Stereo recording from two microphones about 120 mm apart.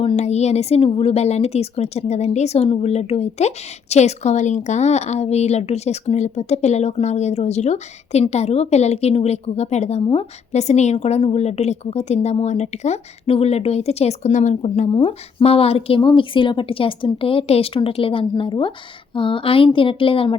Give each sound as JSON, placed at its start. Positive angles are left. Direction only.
{"t": 0.2, "sound": "a woman's voice", "side_deg": 65}
{"t": 15.0, "sound": "a woman's voice", "side_deg": 50}